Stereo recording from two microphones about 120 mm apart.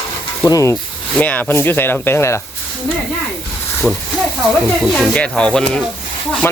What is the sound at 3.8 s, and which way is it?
Speech, 5° left (ahead or behind).